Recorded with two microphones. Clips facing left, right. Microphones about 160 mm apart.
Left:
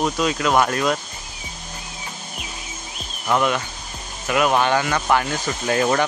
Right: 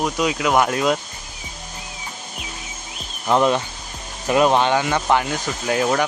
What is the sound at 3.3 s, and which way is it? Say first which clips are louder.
Speech: right 3 dB; 30° right (ahead or behind).